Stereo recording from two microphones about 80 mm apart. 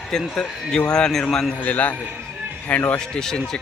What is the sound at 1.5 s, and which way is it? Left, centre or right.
A man's voice, centre.